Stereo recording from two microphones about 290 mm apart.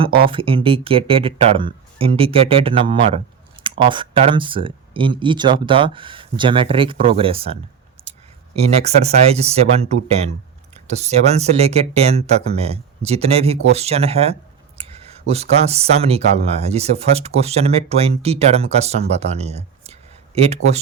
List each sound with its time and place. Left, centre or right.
0.3 s speech: centre
10.8 s speech: right